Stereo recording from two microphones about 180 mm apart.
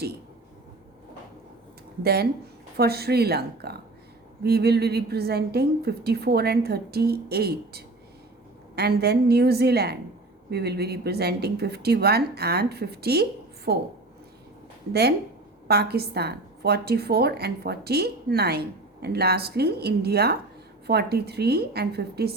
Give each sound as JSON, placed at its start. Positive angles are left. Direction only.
{"t": 2.7, "sound": "a woman's voice", "side_deg": -60}
{"t": 15.6, "sound": "a woman's voice", "side_deg": -60}